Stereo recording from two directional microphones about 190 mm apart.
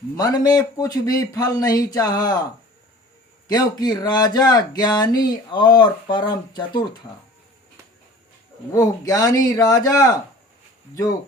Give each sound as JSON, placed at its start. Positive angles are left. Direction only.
{"t": 0.2, "sound": "speech", "side_deg": 20}
{"t": 3.5, "sound": "speech", "side_deg": 20}
{"t": 8.7, "sound": "a man's voice", "side_deg": 15}